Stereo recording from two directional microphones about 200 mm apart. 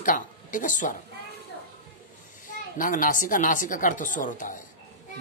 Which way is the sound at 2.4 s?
40° left (ahead or behind).